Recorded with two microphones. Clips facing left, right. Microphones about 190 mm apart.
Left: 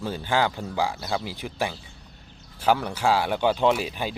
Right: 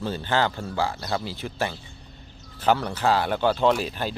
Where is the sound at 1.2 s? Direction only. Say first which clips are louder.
Even; 15° left (ahead or behind).